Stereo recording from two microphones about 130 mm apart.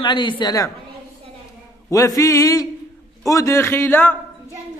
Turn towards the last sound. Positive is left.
turn(degrees=15)  # may be behind; listen again after turning